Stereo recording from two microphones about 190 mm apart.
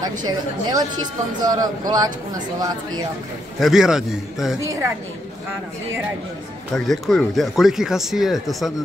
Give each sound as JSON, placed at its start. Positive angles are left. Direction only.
{"t": 0.0, "sound": "speech", "side_deg": -20}
{"t": 3.5, "sound": "speech", "side_deg": 0}
{"t": 4.6, "sound": "a woman's voice", "side_deg": -15}
{"t": 6.7, "sound": "speech", "side_deg": 0}